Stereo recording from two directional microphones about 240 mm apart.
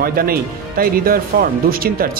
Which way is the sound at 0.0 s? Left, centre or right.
Right.